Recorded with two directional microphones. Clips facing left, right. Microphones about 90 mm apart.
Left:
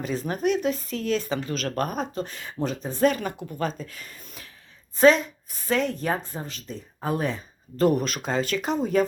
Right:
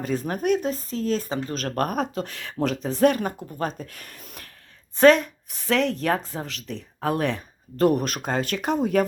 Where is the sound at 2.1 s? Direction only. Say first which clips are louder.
Right 2 dB; 70° right (ahead or behind).